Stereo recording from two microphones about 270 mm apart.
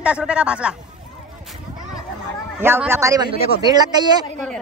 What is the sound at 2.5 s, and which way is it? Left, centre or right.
Speech, centre.